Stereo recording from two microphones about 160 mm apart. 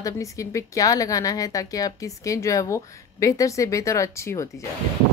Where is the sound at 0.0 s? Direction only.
20° left (ahead or behind).